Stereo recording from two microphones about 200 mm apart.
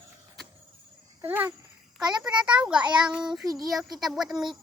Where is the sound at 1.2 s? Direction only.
10° right (ahead or behind).